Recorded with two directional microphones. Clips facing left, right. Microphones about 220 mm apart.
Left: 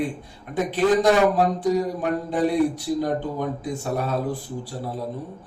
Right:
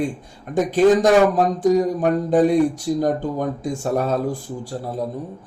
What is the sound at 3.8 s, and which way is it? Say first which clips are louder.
Speech: right 6 dB; 45° right (ahead or behind).